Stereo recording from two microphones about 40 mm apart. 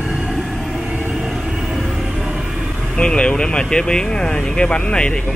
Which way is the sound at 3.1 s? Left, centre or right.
Left.